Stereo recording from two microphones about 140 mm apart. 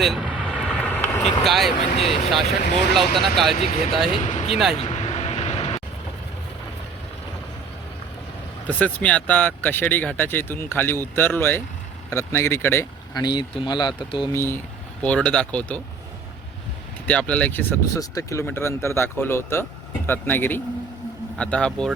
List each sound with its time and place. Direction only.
0.0 s vehicle: 5° right (ahead or behind)
0.8 s vehicle: 10° left (ahead or behind)
1.5 s speech: centre (ahead or behind)
3.5 s speech: 50° left (ahead or behind)
4.5 s speech: centre (ahead or behind)
4.8 s vehicle: 50° left (ahead or behind)
8.8 s speech: 10° left (ahead or behind)
13.1 s speech: 30° left (ahead or behind)
14.3 s speech: 15° left (ahead or behind)
17.1 s speech: 10° left (ahead or behind)